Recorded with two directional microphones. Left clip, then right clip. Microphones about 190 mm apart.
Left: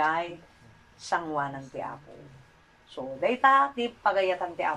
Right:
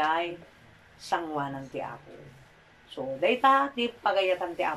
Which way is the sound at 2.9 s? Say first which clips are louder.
Right 2 dB; 10° right (ahead or behind).